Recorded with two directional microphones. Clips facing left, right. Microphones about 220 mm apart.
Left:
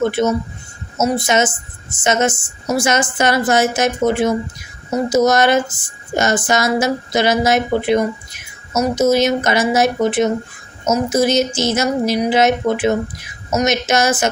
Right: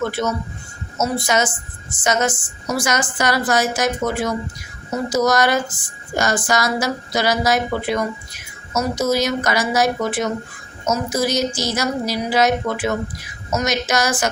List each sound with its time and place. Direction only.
0.0 s a woman's voice: 20° left (ahead or behind)